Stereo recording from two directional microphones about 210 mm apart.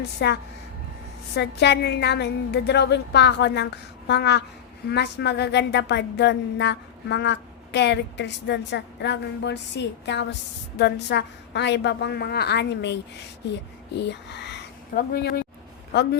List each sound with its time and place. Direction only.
0.0 s a woman's voice: 50° left (ahead or behind)
1.4 s a woman's voice: 55° left (ahead or behind)
14.0 s a woman's voice: 55° left (ahead or behind)